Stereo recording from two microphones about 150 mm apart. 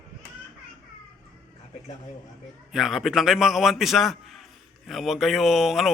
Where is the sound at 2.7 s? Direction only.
Centre (ahead or behind).